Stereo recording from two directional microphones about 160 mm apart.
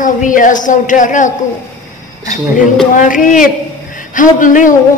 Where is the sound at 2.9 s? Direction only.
55° left (ahead or behind).